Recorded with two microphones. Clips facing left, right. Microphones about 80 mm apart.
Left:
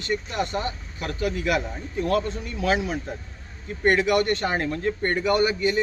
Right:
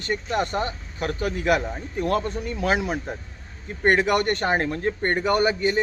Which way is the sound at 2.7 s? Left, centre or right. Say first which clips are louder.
Right 1 dB; right.